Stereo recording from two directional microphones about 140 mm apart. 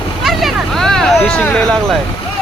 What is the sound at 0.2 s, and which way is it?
Vehicle, centre (ahead or behind).